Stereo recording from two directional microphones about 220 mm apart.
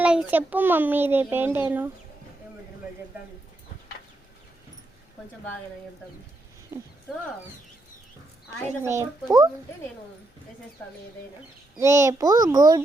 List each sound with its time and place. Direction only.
0.0 s a child's voice: 5° right (ahead or behind)
8.8 s a child's voice: 10° right (ahead or behind)
11.8 s a child's voice: 15° right (ahead or behind)